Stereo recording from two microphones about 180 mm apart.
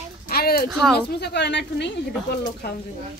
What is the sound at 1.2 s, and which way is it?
Speech, 70° left (ahead or behind).